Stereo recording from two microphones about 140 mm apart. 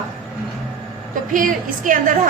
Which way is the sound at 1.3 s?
75° right (ahead or behind).